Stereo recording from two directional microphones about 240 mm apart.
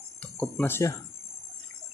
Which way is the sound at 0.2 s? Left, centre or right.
Centre.